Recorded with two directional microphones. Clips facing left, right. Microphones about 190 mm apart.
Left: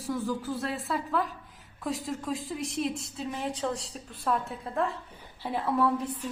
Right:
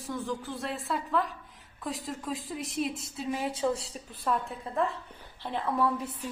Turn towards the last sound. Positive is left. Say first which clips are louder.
# left 2 dB
turn(degrees=0)  # may be behind; listen again after turning